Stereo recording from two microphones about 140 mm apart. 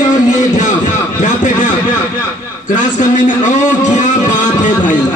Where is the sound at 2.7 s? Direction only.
65° left (ahead or behind).